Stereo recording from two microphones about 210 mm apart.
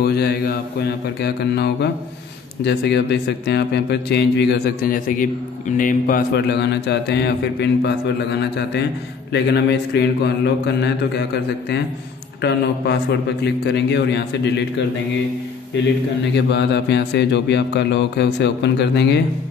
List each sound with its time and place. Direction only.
0.0 s a man's voice: 50° left (ahead or behind)
12.4 s a man's voice: 50° left (ahead or behind)
16.3 s speech: 55° left (ahead or behind)